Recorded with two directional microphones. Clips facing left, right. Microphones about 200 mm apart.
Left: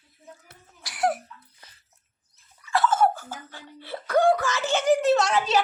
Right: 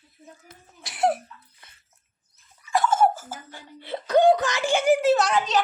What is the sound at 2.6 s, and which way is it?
Speech, 15° right (ahead or behind).